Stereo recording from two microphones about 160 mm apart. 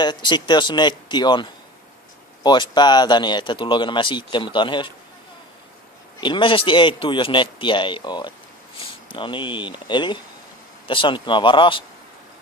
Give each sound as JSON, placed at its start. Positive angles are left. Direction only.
{"t": 0.0, "sound": "speech", "side_deg": 30}
{"t": 6.1, "sound": "speech", "side_deg": 30}